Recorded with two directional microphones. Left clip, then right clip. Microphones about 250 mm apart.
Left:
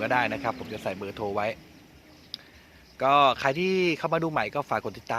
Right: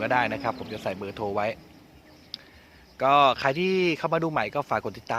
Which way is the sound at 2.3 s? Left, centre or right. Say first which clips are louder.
Even; centre.